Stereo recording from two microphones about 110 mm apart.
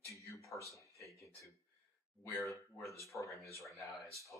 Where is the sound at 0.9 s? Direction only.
30° left (ahead or behind).